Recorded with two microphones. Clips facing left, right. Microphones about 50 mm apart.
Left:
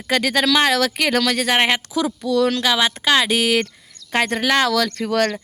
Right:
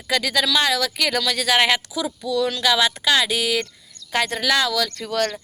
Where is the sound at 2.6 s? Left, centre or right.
Left.